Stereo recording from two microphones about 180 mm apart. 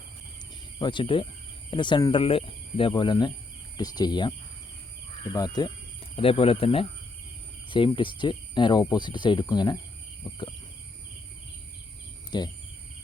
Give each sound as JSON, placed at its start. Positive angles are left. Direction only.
{"t": 0.8, "sound": "speech", "side_deg": 25}
{"t": 7.9, "sound": "speech", "side_deg": 25}
{"t": 12.3, "sound": "speech", "side_deg": 25}